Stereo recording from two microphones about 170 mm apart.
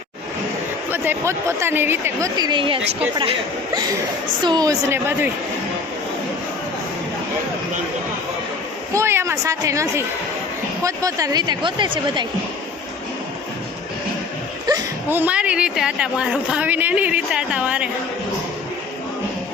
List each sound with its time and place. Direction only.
0.9 s speech: 10° right (ahead or behind)
2.3 s a woman's voice: 25° right (ahead or behind)
4.4 s a woman's voice: 25° right (ahead or behind)
8.9 s a woman's voice: 15° right (ahead or behind)
14.7 s speech: 10° right (ahead or behind)